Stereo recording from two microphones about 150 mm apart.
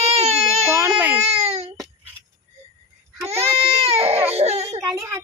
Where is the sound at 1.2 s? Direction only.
45° right (ahead or behind).